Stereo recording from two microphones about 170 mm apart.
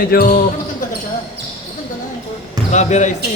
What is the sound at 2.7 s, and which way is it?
Speech, 45° left (ahead or behind).